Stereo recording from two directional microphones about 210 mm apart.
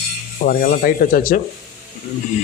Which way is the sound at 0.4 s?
40° left (ahead or behind).